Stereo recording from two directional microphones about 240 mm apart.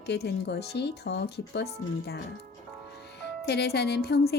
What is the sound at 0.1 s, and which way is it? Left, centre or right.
A woman's voice, left.